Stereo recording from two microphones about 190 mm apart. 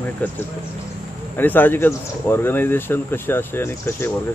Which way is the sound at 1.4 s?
10° left (ahead or behind).